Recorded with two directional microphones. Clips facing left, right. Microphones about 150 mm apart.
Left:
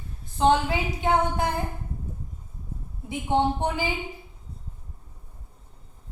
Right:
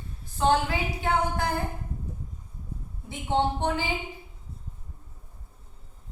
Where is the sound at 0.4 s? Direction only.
20° left (ahead or behind).